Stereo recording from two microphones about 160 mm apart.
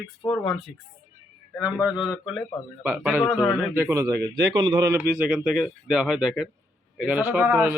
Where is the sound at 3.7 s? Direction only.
20° right (ahead or behind).